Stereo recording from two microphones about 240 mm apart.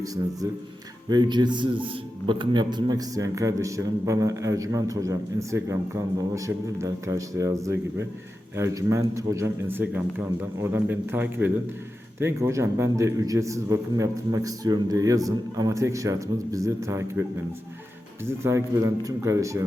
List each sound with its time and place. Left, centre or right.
0.0 s speech: centre
19.0 s speech: centre